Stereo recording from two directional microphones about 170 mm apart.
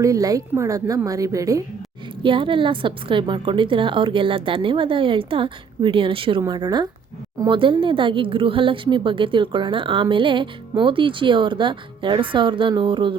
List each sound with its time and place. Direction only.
0.0 s speech: 20° right (ahead or behind)
2.2 s a woman's voice: 30° right (ahead or behind)